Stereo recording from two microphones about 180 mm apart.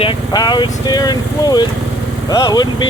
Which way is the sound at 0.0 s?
25° left (ahead or behind).